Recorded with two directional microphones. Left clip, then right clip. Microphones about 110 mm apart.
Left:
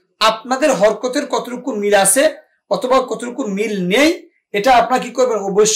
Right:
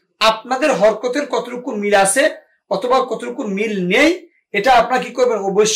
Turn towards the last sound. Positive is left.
turn(degrees=10)  # may be behind; listen again after turning